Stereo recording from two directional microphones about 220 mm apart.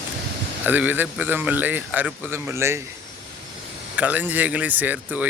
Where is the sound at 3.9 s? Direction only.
5° right (ahead or behind).